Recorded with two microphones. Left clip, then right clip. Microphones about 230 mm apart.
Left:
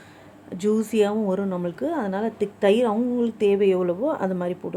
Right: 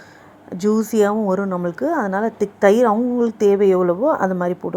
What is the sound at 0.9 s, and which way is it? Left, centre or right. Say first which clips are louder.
Speech: right 5 dB; centre.